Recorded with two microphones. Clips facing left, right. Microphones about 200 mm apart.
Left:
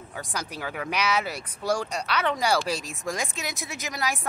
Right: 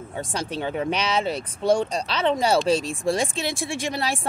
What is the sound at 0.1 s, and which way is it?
Speech, 30° right (ahead or behind).